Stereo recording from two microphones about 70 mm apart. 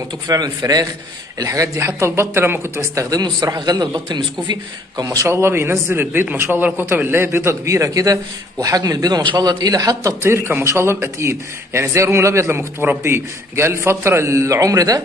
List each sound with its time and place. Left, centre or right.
0.3 s speech: right
1.4 s speech: right
5.3 s a man's voice: right
10.2 s a man's voice: right